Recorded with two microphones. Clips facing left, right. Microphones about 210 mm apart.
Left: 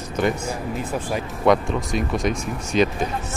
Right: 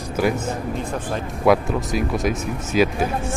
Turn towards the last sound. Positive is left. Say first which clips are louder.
# right 1 dB
turn(degrees=-5)  # may be behind; listen again after turning